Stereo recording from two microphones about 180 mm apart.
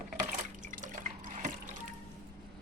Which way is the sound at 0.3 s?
45° right (ahead or behind).